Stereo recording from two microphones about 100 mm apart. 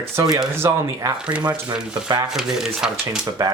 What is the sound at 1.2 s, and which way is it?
Speech, 10° right (ahead or behind).